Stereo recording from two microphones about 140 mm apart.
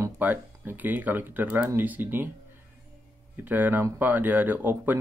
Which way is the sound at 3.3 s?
15° right (ahead or behind).